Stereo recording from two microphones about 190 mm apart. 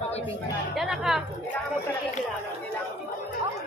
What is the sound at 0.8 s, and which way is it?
Speech, centre (ahead or behind).